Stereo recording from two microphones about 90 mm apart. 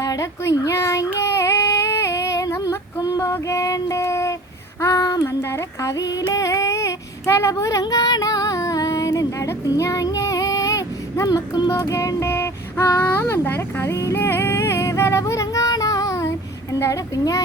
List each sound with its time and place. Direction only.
0.0 s child singing: 40° left (ahead or behind)
5.4 s female singing: 30° left (ahead or behind)
11.7 s child singing: 35° left (ahead or behind)